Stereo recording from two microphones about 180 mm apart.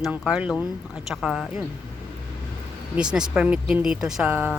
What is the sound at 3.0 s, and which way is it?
Speech, 5° right (ahead or behind).